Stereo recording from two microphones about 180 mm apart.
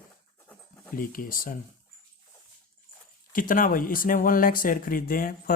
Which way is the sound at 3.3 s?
50° left (ahead or behind).